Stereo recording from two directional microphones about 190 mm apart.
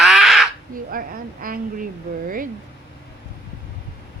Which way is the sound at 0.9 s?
50° right (ahead or behind).